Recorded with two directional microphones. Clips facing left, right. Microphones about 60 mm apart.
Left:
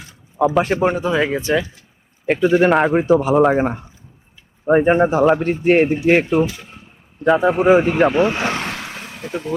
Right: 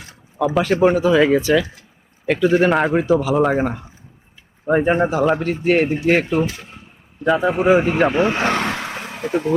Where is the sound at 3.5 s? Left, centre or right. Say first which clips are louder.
Left 2 dB; left.